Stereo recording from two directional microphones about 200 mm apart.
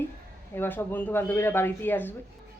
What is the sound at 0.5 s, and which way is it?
Speech, 10° left (ahead or behind).